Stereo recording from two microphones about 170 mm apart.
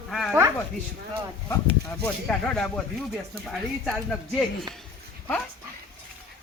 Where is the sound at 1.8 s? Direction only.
5° left (ahead or behind).